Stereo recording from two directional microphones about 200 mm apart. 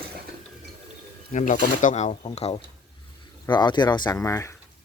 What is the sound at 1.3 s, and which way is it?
Speech, 40° left (ahead or behind).